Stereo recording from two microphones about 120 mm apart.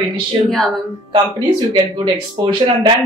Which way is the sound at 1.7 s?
40° right (ahead or behind).